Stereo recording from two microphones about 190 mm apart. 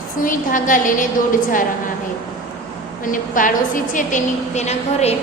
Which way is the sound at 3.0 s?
45° left (ahead or behind).